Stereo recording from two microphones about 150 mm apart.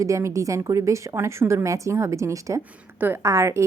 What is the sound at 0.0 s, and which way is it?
A woman's voice, 20° right (ahead or behind).